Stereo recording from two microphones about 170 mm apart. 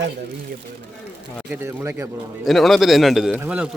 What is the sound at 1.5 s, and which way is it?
Speech, 15° right (ahead or behind).